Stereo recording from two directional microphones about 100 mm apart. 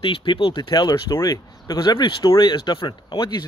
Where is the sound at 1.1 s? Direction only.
35° left (ahead or behind).